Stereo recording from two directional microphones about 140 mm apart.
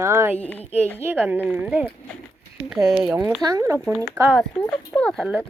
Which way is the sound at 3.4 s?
25° right (ahead or behind).